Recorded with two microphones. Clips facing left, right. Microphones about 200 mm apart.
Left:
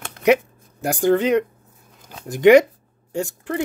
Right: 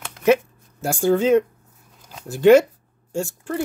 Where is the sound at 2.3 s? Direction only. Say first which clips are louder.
Left 1 dB; 15° left (ahead or behind).